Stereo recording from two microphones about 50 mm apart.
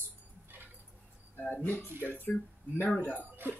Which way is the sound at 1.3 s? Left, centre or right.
Left.